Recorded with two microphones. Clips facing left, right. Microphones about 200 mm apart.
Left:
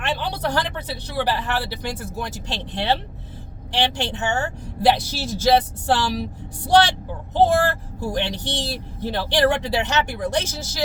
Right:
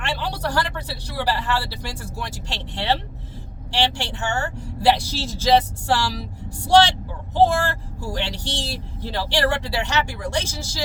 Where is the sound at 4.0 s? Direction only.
20° left (ahead or behind).